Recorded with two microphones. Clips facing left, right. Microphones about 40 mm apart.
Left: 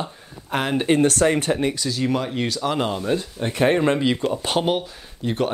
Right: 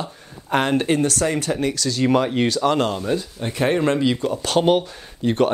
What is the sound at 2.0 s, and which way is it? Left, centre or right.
Speech, centre.